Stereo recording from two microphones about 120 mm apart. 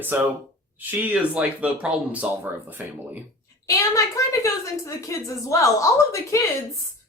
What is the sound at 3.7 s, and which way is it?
A woman's voice, 25° left (ahead or behind).